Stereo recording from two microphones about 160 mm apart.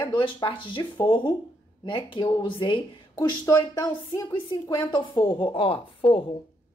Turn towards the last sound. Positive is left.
turn(degrees=35)  # may be behind; listen again after turning